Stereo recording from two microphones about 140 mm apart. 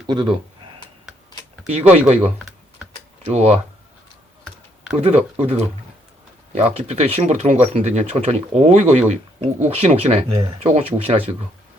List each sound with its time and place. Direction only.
0.1 s speech: 35° right (ahead or behind)
1.6 s speech: 50° right (ahead or behind)
4.9 s speech: 45° right (ahead or behind)